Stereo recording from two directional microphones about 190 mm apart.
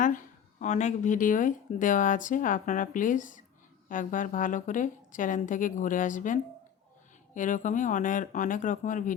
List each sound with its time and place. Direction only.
0.0 s speech: 45° left (ahead or behind)